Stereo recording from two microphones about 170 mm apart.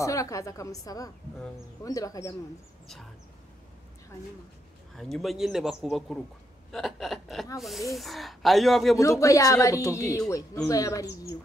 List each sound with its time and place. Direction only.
0.0 s speech: 20° left (ahead or behind)
4.9 s a man's voice: centre (ahead or behind)
8.9 s speech: 20° left (ahead or behind)